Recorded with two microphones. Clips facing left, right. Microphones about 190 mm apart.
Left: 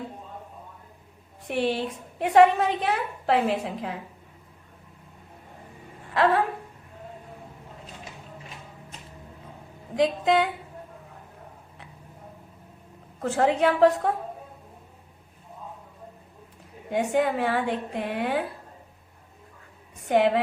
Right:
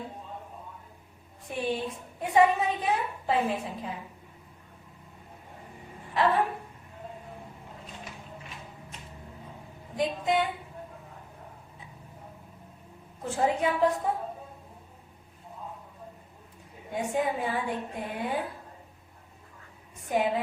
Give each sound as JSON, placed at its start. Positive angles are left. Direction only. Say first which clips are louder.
{"t": 1.5, "sound": "a woman's voice", "louder": "left 5 dB", "side_deg": 75}
{"t": 9.9, "sound": "speech", "louder": "left 5 dB", "side_deg": 90}
{"t": 13.2, "sound": "a woman's voice", "louder": "left 5 dB", "side_deg": 75}
{"t": 16.9, "sound": "a woman's voice", "louder": "left 5 dB", "side_deg": 75}
{"t": 20.1, "sound": "a woman's voice", "louder": "left 6 dB", "side_deg": 80}